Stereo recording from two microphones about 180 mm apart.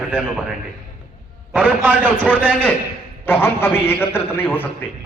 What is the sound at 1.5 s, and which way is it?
Speech, 10° right (ahead or behind).